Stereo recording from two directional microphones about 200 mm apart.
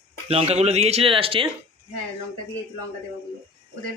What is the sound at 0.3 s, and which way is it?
Speech, 30° right (ahead or behind).